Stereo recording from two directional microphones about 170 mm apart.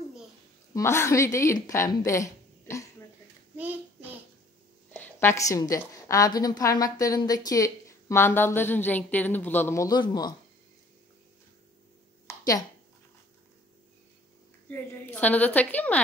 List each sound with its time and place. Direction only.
0.7 s a woman's voice: 15° left (ahead or behind)
3.5 s child singing: 10° right (ahead or behind)
4.9 s a woman's voice: 15° left (ahead or behind)
12.3 s a sound: 20° left (ahead or behind)
14.7 s a woman's voice: 10° left (ahead or behind)